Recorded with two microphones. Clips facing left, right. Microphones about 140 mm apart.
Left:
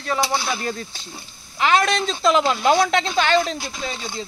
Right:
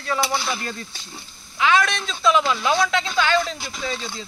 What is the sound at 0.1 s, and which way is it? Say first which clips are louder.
Speech: left 1 dB; 20° left (ahead or behind).